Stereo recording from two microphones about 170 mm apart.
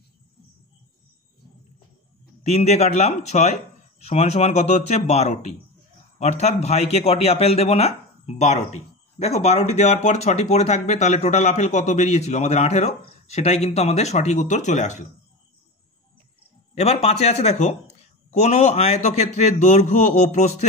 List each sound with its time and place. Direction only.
2.4 s a man's voice: 40° left (ahead or behind)
16.7 s speech: 40° left (ahead or behind)